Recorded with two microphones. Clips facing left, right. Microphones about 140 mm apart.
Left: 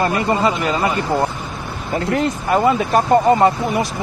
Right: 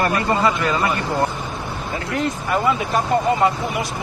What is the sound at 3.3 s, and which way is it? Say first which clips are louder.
Speech: left 6 dB; 35° left (ahead or behind).